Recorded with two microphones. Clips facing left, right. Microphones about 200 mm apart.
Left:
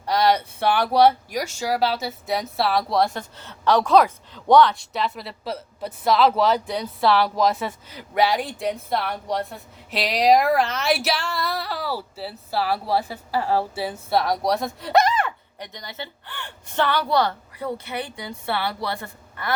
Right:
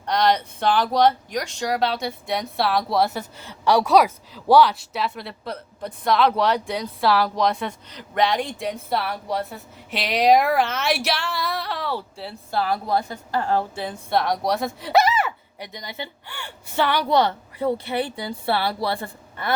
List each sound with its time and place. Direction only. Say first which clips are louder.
0.0 s speech: left 1 dB; 5° left (ahead or behind); by 19.5 s 30° right (ahead or behind)